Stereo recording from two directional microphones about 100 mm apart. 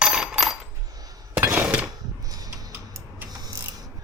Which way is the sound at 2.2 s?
40° right (ahead or behind).